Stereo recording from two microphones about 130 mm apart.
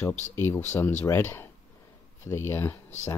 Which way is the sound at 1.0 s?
20° left (ahead or behind).